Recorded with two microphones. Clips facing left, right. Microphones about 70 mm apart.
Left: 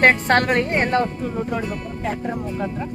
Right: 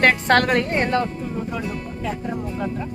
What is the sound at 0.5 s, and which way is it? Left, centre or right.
Speech, centre.